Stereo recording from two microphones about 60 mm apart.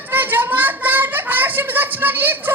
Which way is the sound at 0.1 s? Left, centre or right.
Right.